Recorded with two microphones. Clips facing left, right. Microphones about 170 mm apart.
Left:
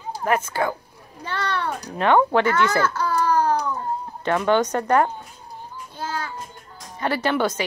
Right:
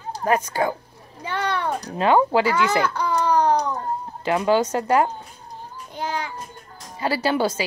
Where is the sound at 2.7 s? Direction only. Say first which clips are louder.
Even; 15° right (ahead or behind).